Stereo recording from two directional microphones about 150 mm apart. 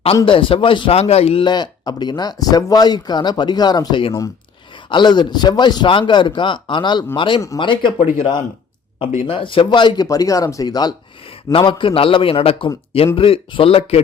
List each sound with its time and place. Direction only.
0.3 s a man's voice: 35° left (ahead or behind)